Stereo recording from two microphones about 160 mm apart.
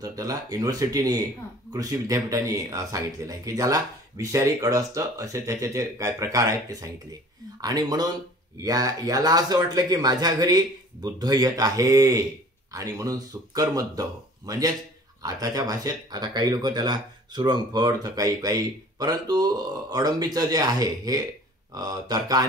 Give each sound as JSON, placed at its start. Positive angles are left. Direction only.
{"t": 0.0, "sound": "speech", "side_deg": -20}